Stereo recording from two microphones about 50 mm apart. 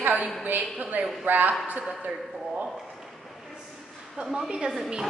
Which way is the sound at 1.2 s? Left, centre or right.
Right.